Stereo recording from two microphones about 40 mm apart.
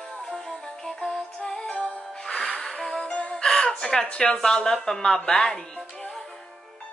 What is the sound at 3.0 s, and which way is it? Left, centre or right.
Music, left.